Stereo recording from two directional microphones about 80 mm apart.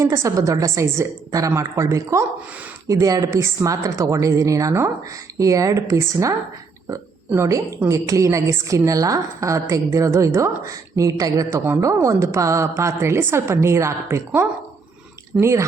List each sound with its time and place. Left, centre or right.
0.0 s a woman's voice: right
7.3 s a woman's voice: right
15.4 s a woman's voice: right